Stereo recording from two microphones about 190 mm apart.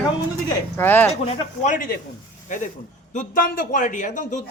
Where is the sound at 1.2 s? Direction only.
35° left (ahead or behind).